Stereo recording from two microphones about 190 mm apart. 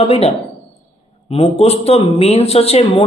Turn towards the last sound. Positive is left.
turn(degrees=35)  # may be behind; listen again after turning